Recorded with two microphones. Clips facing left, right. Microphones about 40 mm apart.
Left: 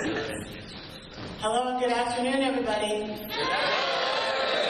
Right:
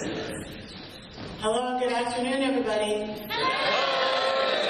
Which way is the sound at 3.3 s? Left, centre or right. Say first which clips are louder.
Right 2 dB; centre.